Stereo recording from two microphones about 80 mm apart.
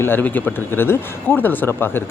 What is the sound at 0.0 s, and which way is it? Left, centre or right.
A woman's voice, left.